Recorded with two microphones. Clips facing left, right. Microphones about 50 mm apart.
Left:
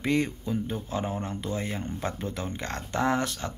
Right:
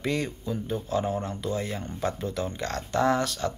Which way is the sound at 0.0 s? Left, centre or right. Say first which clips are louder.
Left 2 dB; left.